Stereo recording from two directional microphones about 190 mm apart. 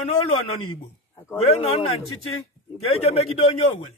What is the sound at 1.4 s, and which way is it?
A man's voice, 30° left (ahead or behind).